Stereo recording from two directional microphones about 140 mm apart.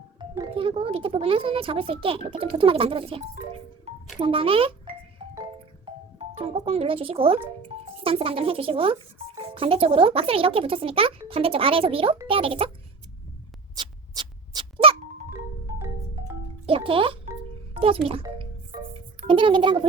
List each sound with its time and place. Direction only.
0.2 s speech: 35° right (ahead or behind)
3.9 s music: 50° right (ahead or behind)
4.2 s speech: 40° right (ahead or behind)
5.8 s music: 40° right (ahead or behind)
8.0 s speech: 40° right (ahead or behind)
13.7 s a sound: 30° right (ahead or behind)
16.6 s music: 40° right (ahead or behind)
17.7 s a child's voice: 40° right (ahead or behind)
19.3 s speech: 35° right (ahead or behind)